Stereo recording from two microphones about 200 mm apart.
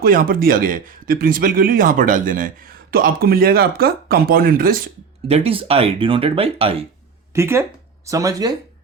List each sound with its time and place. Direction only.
0.0 s speech: 45° right (ahead or behind)
5.3 s speech: 30° right (ahead or behind)
7.3 s speech: 10° right (ahead or behind)